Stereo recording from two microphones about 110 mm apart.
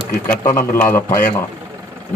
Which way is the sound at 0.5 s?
20° left (ahead or behind).